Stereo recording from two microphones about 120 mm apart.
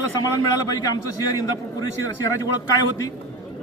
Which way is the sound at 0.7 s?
30° left (ahead or behind).